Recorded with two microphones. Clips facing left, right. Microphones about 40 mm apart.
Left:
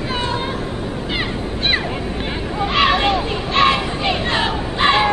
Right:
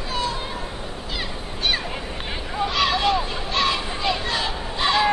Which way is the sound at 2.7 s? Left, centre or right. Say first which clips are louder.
Left 5 dB; left.